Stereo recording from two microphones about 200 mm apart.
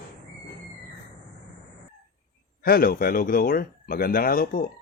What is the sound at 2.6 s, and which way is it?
Speech, 50° left (ahead or behind).